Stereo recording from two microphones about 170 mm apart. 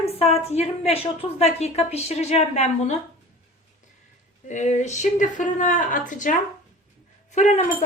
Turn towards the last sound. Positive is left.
turn(degrees=45)  # may be behind; listen again after turning